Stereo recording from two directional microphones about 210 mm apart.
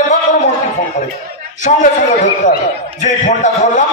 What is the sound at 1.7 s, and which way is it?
Speech, 35° left (ahead or behind).